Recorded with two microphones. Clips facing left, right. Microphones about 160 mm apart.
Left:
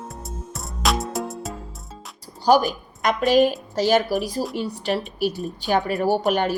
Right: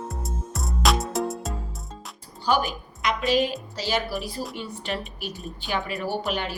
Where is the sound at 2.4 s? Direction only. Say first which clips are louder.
Left 7 dB; 40° left (ahead or behind).